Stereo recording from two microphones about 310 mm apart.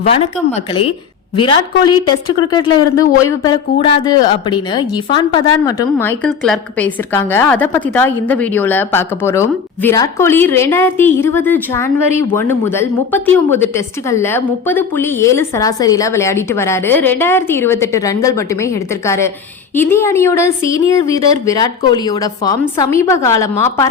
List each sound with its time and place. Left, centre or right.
0.1 s a woman's voice: centre